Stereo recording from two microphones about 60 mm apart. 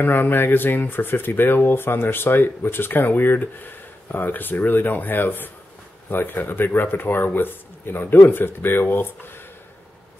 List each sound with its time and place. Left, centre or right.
0.0 s speech: left